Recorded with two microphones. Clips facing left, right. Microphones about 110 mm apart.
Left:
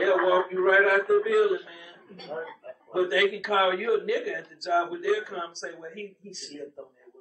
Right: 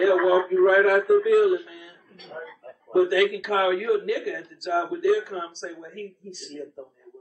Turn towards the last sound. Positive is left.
turn(degrees=0)  # may be behind; listen again after turning